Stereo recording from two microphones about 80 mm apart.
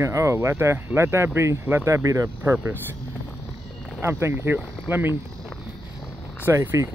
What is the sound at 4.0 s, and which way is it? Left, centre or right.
Speech, right.